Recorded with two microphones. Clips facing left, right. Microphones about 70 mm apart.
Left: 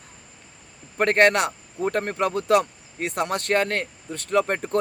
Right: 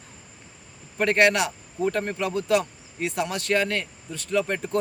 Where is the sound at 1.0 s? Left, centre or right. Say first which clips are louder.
Left 2 dB; left.